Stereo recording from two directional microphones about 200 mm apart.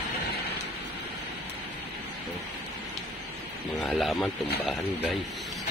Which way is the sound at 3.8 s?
Centre (ahead or behind).